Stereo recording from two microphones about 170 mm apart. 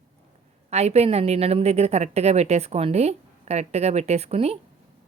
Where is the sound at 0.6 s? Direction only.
40° right (ahead or behind).